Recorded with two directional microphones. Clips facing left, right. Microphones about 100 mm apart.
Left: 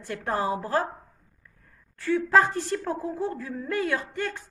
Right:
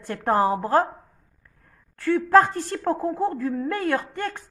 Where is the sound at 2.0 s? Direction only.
55° right (ahead or behind).